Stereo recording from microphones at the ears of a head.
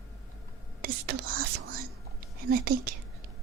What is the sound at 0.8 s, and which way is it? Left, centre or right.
Whispering, right.